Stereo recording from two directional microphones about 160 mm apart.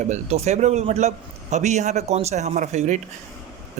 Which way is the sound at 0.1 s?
40° right (ahead or behind).